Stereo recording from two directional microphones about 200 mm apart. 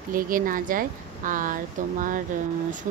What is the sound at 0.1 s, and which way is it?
Speech, 45° right (ahead or behind).